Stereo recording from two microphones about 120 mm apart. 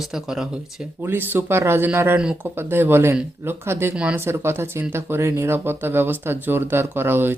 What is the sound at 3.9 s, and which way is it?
Speech, 10° right (ahead or behind).